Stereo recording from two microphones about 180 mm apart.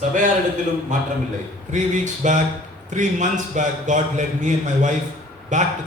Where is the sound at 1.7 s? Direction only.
45° right (ahead or behind).